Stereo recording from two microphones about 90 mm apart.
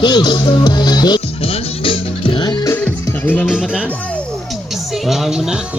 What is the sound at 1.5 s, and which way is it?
Music, 75° left (ahead or behind).